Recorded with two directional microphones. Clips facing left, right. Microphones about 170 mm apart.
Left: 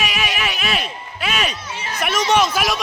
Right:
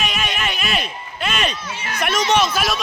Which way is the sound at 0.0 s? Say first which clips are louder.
Left 1 dB; 5° left (ahead or behind).